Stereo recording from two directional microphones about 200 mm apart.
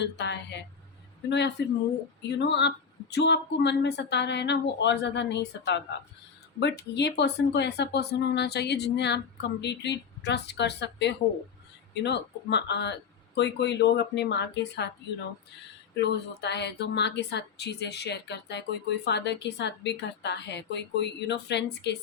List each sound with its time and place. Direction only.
0.0 s speech: 60° left (ahead or behind)